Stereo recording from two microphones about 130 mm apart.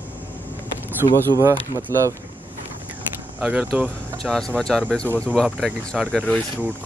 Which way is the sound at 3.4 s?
10° right (ahead or behind).